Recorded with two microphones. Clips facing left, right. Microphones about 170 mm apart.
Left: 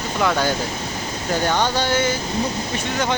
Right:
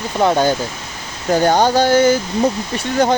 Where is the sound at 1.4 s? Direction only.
40° right (ahead or behind).